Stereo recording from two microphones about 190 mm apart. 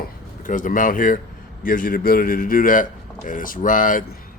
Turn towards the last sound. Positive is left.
turn(degrees=45)  # may be behind; listen again after turning